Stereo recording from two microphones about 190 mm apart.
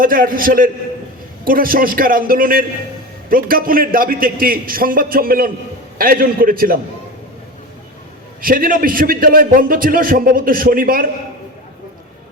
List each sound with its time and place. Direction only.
0.0 s a man's voice: 45° right (ahead or behind)
8.4 s a man's voice: 50° right (ahead or behind)